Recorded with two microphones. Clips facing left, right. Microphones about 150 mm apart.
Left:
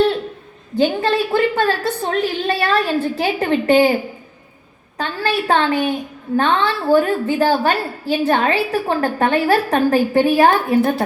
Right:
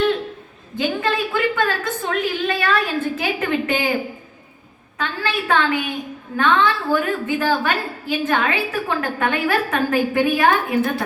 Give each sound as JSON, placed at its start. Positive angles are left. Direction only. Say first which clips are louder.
{"t": 0.8, "sound": "a woman's voice", "louder": "left 5 dB", "side_deg": 35}
{"t": 4.9, "sound": "a woman's voice", "louder": "left 4 dB", "side_deg": 40}